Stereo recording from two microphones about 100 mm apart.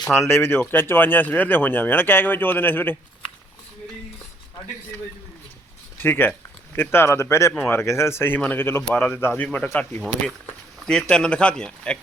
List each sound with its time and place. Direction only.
0.1 s speech: 25° left (ahead or behind)
6.0 s speech: 20° left (ahead or behind)
10.8 s speech: 10° left (ahead or behind)